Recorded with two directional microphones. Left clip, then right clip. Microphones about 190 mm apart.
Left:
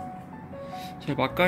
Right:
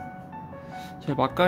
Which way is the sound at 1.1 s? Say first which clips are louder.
Right 1 dB; 15° right (ahead or behind).